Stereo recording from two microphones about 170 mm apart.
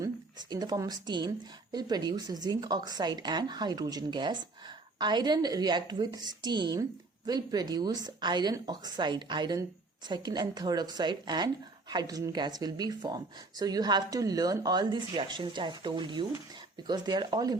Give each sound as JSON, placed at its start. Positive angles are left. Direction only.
{"t": 0.0, "sound": "speech", "side_deg": -25}